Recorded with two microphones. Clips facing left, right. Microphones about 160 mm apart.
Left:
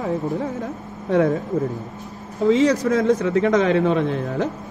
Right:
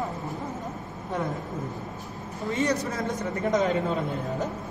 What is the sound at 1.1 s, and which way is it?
Speech, 90° left.